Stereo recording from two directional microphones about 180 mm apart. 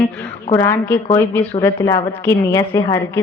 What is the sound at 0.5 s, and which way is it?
A woman's voice, 15° left (ahead or behind).